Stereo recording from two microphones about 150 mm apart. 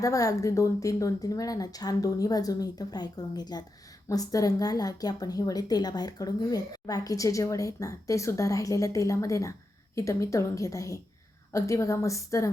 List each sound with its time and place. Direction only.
0.0 s a woman's voice: 20° left (ahead or behind)